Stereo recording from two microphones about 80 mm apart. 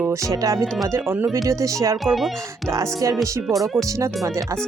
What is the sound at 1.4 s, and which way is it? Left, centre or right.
Speech, right.